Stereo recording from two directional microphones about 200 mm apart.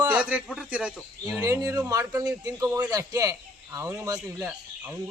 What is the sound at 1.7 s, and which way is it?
A man's voice, 15° right (ahead or behind).